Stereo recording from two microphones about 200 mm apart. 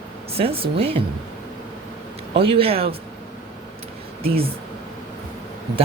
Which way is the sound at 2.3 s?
25° right (ahead or behind).